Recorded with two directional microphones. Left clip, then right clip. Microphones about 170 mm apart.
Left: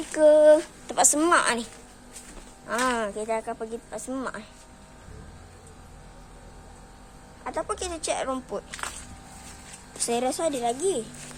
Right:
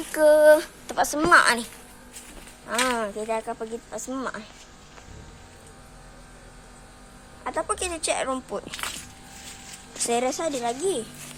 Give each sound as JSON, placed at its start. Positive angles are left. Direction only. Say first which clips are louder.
{"t": 0.1, "sound": "female singing", "louder": "right 1 dB", "side_deg": 15}
{"t": 1.3, "sound": "speech", "louder": "right 5 dB", "side_deg": 5}
{"t": 7.4, "sound": "speech", "louder": "right 3 dB", "side_deg": -15}
{"t": 10.0, "sound": "speech", "louder": "right 1 dB", "side_deg": 0}